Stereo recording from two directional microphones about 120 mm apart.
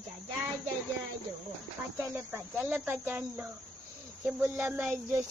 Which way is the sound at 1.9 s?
15° right (ahead or behind).